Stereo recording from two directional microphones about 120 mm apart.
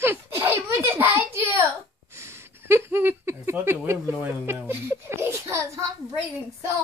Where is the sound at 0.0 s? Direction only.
20° right (ahead or behind).